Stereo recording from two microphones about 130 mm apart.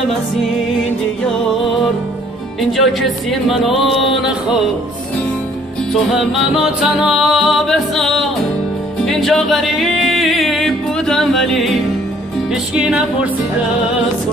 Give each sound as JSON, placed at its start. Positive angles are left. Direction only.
{"t": 2.7, "sound": "music", "side_deg": 0}
{"t": 6.3, "sound": "music", "side_deg": -5}